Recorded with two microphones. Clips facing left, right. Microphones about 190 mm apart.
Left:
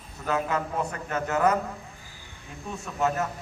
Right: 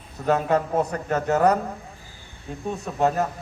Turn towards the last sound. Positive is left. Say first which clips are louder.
# right 5 dB
turn(degrees=-35)  # may be behind; listen again after turning